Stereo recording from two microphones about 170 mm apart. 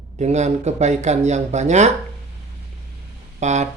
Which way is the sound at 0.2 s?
40° right (ahead or behind).